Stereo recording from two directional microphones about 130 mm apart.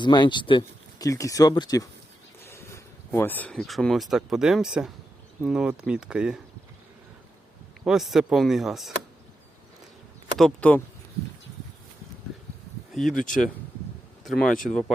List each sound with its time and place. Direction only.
0.0 s speech: 35° left (ahead or behind)
1.0 s speech: 25° left (ahead or behind); by 6.4 s 5° right (ahead or behind)
7.9 s speech: centre (ahead or behind)
10.3 s speech: 5° left (ahead or behind)
12.9 s speech: centre (ahead or behind)
13.1 s speech: 90° left
14.3 s speech: 5° left (ahead or behind)